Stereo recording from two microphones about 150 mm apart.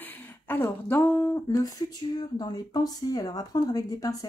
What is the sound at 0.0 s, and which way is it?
Speech, 15° left (ahead or behind).